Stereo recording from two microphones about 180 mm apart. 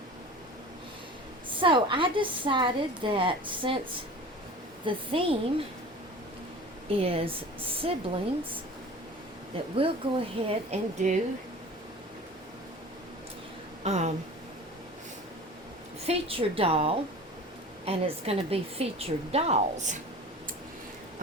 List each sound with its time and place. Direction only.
1.5 s a woman's voice: 25° right (ahead or behind)
4.9 s a woman's voice: 30° right (ahead or behind)
6.8 s a woman's voice: 30° right (ahead or behind)
9.7 s a woman's voice: 30° right (ahead or behind)
13.8 s a woman's voice: 40° right (ahead or behind)
16.0 s a woman's voice: 30° right (ahead or behind)